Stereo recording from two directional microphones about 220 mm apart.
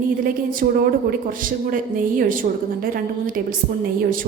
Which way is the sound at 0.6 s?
40° right (ahead or behind).